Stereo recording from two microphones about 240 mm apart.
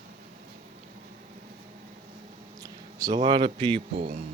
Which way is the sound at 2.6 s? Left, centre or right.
Centre.